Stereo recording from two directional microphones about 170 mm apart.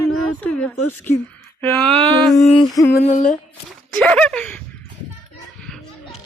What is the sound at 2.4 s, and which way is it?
Speech, 30° left (ahead or behind).